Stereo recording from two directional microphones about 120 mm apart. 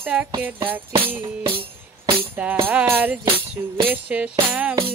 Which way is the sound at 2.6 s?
15° right (ahead or behind).